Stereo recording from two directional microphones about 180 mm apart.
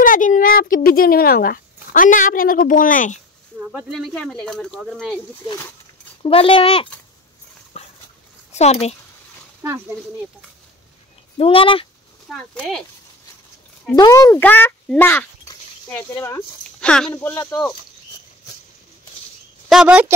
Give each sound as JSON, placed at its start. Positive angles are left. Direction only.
{"t": 0.0, "sound": "speech", "side_deg": 45}
{"t": 3.5, "sound": "a sound", "side_deg": -10}
{"t": 3.9, "sound": "speech", "side_deg": 5}
{"t": 5.4, "sound": "speech", "side_deg": 25}
{"t": 7.7, "sound": "dog", "side_deg": 35}
{"t": 8.5, "sound": "speech", "side_deg": 35}
{"t": 9.6, "sound": "speech", "side_deg": -15}
{"t": 11.3, "sound": "speech", "side_deg": 30}
{"t": 12.3, "sound": "speech", "side_deg": 5}
{"t": 13.9, "sound": "speech", "side_deg": 20}
{"t": 19.7, "sound": "speech", "side_deg": -5}